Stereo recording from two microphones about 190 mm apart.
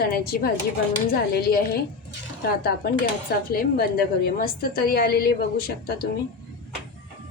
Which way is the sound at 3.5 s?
50° left (ahead or behind).